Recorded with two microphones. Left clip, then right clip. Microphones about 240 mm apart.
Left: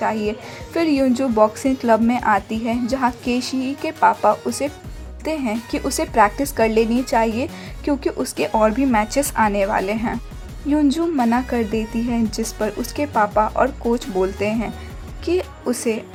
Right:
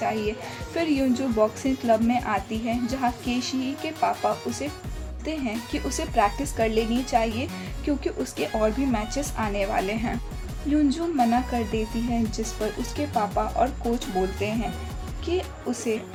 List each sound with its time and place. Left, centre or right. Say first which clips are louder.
0.0 s a woman's voice: left 5 dB; left
15.7 s a woman's voice: left 5 dB; left